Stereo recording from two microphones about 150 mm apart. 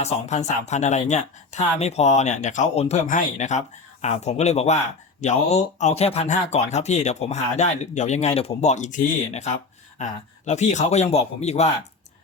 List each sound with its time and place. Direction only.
0.0 s speech: 45° left (ahead or behind)